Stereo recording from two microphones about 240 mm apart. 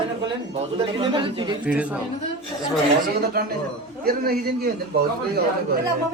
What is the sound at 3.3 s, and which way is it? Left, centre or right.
A man's voice, right.